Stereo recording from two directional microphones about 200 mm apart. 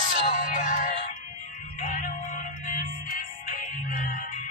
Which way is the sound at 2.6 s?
40° left (ahead or behind).